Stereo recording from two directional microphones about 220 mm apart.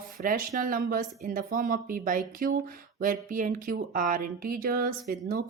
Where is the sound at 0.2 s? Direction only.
40° right (ahead or behind).